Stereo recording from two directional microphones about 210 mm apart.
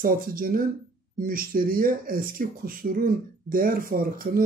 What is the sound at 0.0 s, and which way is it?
Speech, 45° right (ahead or behind).